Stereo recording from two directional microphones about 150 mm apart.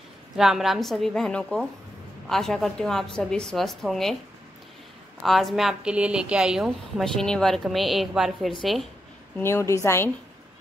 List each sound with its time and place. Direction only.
0.4 s a woman's voice: centre (ahead or behind)
5.2 s a woman's voice: centre (ahead or behind)
9.4 s a woman's voice: 15° left (ahead or behind)